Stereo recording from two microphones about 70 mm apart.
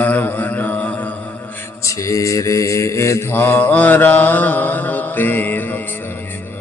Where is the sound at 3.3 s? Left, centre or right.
Left.